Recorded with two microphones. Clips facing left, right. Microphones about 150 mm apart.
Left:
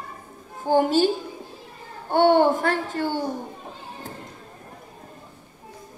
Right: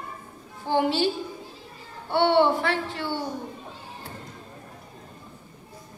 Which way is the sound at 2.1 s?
45° left (ahead or behind).